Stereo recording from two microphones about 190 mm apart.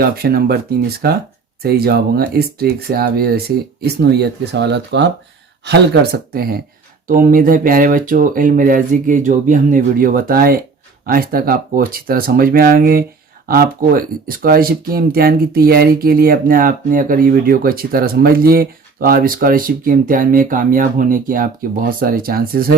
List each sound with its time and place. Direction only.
0.0 s speech: 55° right (ahead or behind)